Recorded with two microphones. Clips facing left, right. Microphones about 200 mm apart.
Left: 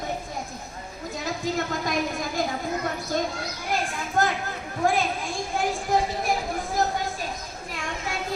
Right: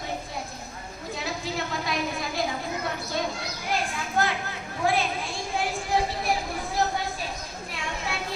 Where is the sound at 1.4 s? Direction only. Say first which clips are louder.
Left 4 dB; 45° left (ahead or behind).